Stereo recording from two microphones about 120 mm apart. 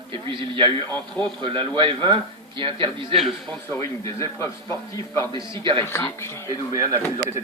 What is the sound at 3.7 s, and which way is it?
Speech, 25° left (ahead or behind).